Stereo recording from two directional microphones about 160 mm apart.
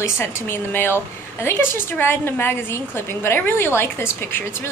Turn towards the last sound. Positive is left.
turn(degrees=15)  # may be behind; listen again after turning